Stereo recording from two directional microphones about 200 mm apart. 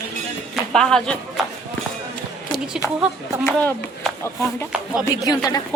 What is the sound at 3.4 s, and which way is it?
Speech, 10° left (ahead or behind).